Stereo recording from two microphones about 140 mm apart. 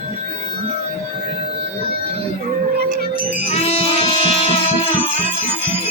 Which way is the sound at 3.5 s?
45° left (ahead or behind).